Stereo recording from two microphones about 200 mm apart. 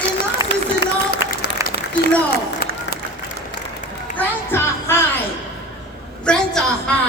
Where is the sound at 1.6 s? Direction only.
15° right (ahead or behind).